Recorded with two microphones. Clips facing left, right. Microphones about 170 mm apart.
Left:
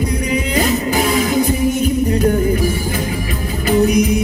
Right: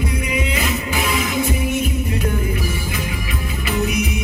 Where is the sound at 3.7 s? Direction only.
35° left (ahead or behind).